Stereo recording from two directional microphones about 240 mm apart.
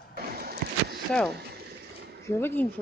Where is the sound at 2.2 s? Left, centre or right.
Centre.